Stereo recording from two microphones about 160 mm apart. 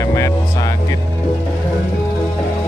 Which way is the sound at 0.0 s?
20° left (ahead or behind).